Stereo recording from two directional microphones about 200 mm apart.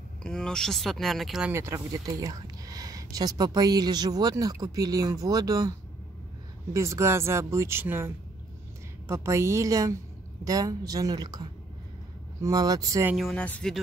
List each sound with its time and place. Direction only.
0.2 s speech: 5° left (ahead or behind); by 13.1 s 15° right (ahead or behind)
13.1 s speech: centre (ahead or behind)